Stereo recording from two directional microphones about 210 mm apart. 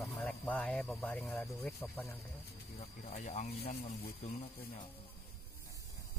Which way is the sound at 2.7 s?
35° left (ahead or behind).